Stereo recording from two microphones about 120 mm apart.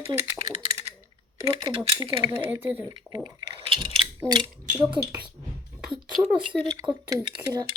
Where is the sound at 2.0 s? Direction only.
45° right (ahead or behind).